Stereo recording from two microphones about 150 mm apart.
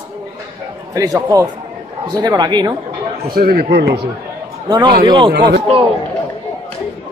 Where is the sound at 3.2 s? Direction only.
85° right.